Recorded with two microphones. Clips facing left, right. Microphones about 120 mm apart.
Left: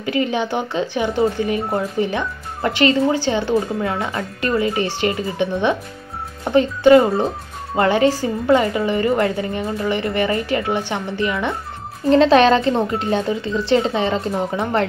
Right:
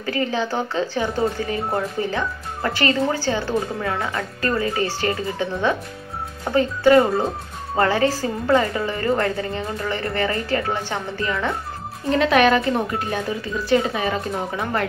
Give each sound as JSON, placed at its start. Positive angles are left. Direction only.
{"t": 0.0, "sound": "speech", "side_deg": 20}